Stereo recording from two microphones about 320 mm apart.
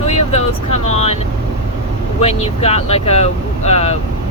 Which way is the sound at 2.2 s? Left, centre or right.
Centre.